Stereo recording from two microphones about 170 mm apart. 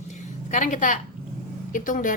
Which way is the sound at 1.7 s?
50° left (ahead or behind).